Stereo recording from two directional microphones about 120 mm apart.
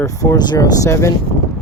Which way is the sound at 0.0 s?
25° left (ahead or behind).